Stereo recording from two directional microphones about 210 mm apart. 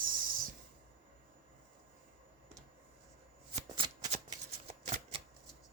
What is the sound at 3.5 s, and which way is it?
Shuffling cards, 25° right (ahead or behind).